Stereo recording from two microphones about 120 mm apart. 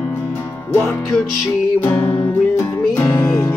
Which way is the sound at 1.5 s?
15° left (ahead or behind).